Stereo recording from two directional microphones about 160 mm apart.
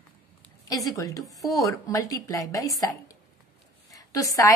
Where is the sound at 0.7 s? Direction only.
20° left (ahead or behind).